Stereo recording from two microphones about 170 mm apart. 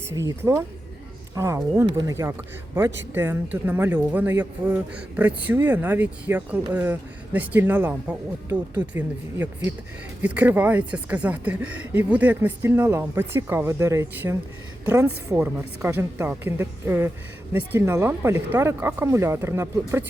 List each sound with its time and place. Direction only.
0.1 s speech: 15° right (ahead or behind)